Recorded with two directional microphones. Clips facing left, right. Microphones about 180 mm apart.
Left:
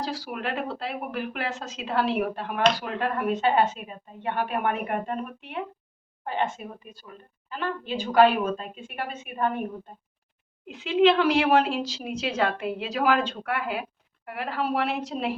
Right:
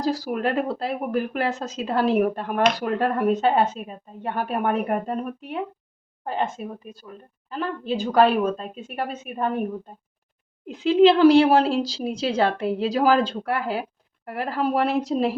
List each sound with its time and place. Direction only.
0.0 s speech: 40° right (ahead or behind)
7.9 s speech: 35° right (ahead or behind)
10.7 s speech: 35° right (ahead or behind)